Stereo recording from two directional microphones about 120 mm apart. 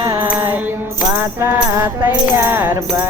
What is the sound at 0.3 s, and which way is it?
Music, 15° right (ahead or behind).